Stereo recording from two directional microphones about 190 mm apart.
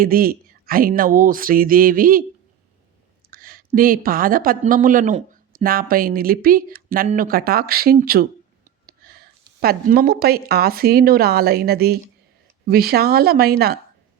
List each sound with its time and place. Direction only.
0.0 s a woman's voice: 50° right (ahead or behind)
3.2 s a woman's voice: 50° right (ahead or behind)